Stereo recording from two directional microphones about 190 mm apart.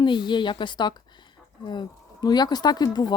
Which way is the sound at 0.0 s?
25° left (ahead or behind).